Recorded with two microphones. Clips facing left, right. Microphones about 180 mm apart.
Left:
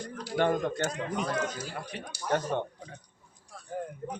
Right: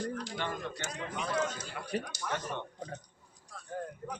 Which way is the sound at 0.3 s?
50° left (ahead or behind).